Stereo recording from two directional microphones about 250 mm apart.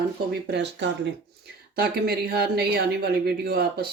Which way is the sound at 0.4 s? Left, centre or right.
Right.